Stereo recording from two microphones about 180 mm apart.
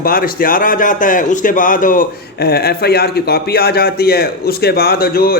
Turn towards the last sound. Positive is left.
turn(degrees=55)  # may be behind; listen again after turning